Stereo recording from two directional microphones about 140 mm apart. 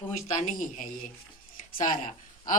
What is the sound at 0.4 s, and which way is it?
Speech, 70° left (ahead or behind).